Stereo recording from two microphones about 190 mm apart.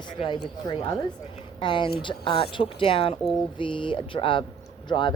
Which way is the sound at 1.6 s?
25° left (ahead or behind).